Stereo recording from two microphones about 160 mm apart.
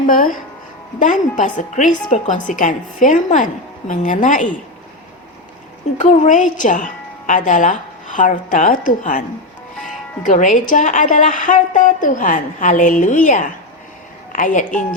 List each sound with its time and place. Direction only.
0.0 s a woman's voice: 55° left (ahead or behind)
6.0 s a woman's voice: 55° left (ahead or behind)
10.2 s a woman's voice: 55° left (ahead or behind)